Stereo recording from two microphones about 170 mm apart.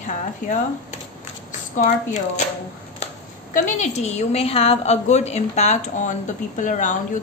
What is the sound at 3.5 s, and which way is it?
A woman's voice, 45° left (ahead or behind).